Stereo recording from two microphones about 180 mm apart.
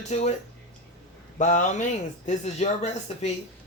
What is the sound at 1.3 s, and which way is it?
Speech, 45° left (ahead or behind).